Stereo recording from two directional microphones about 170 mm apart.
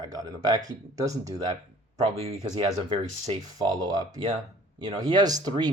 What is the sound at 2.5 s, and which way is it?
Speech, 30° right (ahead or behind).